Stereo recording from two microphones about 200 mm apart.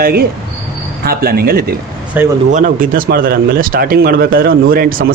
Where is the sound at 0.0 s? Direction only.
50° right (ahead or behind).